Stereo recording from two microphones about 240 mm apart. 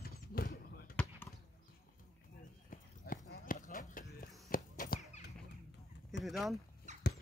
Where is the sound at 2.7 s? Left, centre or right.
Left.